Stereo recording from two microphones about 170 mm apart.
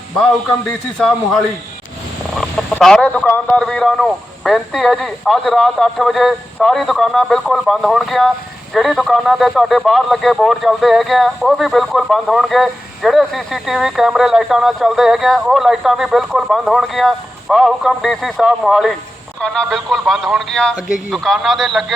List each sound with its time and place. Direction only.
0.9 s speech: centre (ahead or behind)
2.3 s chicken: centre (ahead or behind)
2.7 s speech: 5° left (ahead or behind)